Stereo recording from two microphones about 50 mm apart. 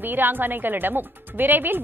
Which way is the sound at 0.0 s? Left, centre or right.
Right.